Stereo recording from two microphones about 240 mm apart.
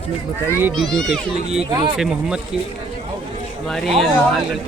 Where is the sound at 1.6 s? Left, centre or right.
Centre.